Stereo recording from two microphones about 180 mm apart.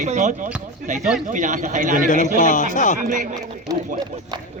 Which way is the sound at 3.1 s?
45° right (ahead or behind).